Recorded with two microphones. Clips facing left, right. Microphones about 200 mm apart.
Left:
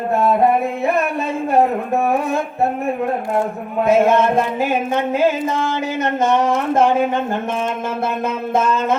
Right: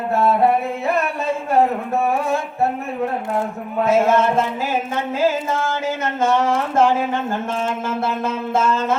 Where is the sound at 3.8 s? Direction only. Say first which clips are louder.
Left 2 dB; 15° left (ahead or behind).